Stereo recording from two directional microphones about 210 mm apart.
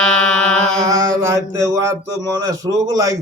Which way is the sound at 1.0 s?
15° right (ahead or behind).